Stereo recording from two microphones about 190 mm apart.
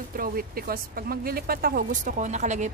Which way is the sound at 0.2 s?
50° right (ahead or behind).